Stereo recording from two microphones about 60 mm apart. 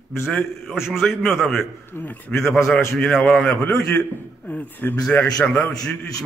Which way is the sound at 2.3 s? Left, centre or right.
Centre.